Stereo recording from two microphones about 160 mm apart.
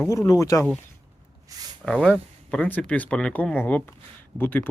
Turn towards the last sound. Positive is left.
turn(degrees=10)  # may be behind; listen again after turning